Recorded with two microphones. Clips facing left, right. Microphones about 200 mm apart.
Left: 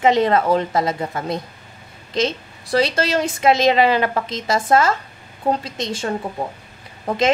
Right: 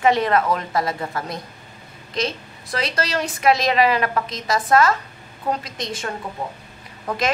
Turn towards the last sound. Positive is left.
turn(degrees=25)  # may be behind; listen again after turning